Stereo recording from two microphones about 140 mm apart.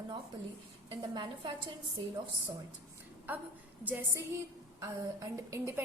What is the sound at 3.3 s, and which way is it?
A woman's voice, 15° right (ahead or behind).